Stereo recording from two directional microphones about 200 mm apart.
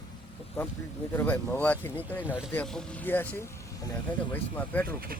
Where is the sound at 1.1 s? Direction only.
10° left (ahead or behind).